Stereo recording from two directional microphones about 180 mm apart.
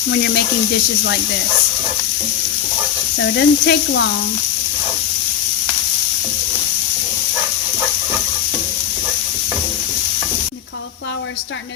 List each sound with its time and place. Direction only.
3.2 s speech: 75° left (ahead or behind)